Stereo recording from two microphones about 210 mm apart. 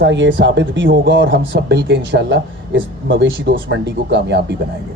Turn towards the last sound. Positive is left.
turn(degrees=-55)  # may be behind; listen again after turning